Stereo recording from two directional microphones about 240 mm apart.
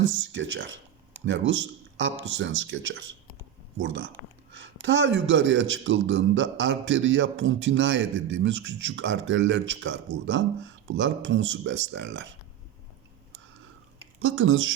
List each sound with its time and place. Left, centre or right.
0.3 s a man's voice: right
14.2 s a man's voice: right